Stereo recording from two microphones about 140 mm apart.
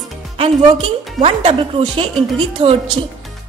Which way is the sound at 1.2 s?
50° right (ahead or behind).